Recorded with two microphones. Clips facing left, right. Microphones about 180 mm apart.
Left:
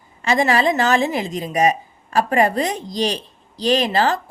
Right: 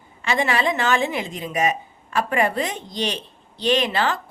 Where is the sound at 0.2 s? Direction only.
40° left (ahead or behind).